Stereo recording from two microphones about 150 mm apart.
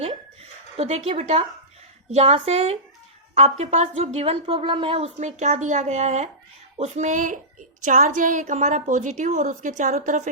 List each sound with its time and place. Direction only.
0.8 s a woman's voice: 45° right (ahead or behind)